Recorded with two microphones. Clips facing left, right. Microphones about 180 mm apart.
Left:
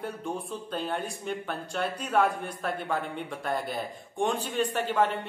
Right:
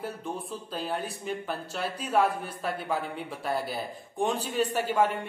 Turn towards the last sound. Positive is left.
turn(degrees=-10)  # may be behind; listen again after turning